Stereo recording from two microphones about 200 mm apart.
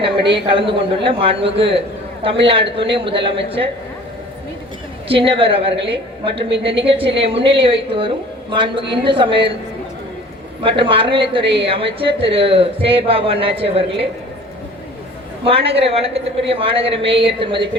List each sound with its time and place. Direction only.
0.0 s a woman's voice: 25° right (ahead or behind)
5.0 s a woman's voice: 25° right (ahead or behind)
10.6 s a woman's voice: 25° right (ahead or behind)
15.4 s a woman's voice: 30° right (ahead or behind)